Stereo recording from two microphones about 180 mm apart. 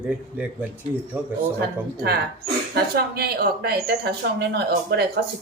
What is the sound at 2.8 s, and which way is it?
Speech, 60° right (ahead or behind).